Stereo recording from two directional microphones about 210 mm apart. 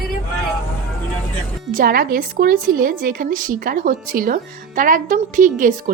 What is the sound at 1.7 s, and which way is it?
A woman's voice, 45° right (ahead or behind).